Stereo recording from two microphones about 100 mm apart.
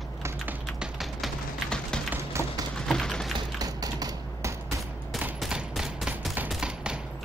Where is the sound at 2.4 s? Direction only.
30° right (ahead or behind).